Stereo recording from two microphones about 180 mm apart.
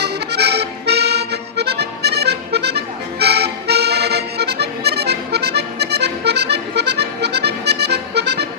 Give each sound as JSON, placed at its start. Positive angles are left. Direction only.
{"t": 0.0, "sound": "accordion", "side_deg": -65}